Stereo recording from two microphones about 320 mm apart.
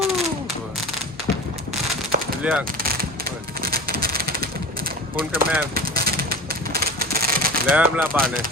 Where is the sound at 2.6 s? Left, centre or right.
Right.